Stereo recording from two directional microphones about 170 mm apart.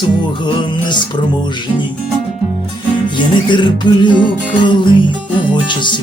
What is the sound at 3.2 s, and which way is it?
Music, 25° left (ahead or behind).